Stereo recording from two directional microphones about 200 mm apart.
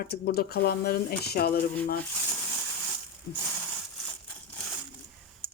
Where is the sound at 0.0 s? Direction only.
50° left (ahead or behind).